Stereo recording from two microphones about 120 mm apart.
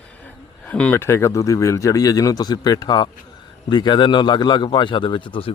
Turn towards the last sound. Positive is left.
turn(degrees=45)  # may be behind; listen again after turning